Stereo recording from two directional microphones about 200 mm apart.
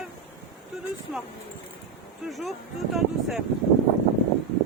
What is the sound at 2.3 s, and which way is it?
Speech, centre (ahead or behind).